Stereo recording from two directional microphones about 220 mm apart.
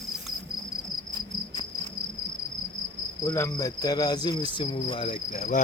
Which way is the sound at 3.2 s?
15° left (ahead or behind).